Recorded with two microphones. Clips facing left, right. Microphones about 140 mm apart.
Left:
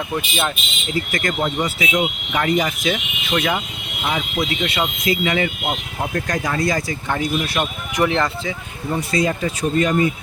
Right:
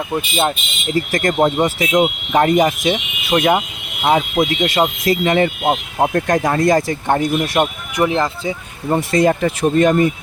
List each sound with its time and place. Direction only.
0.1 s speech: 25° right (ahead or behind)
0.9 s speech: 45° right (ahead or behind)
8.0 s speech: 20° right (ahead or behind)
8.9 s speech: 55° right (ahead or behind)